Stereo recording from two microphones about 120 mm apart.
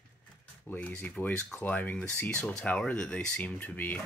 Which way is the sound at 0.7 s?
10° left (ahead or behind).